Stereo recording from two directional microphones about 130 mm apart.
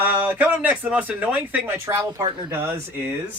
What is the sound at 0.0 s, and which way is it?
Speech, 15° right (ahead or behind).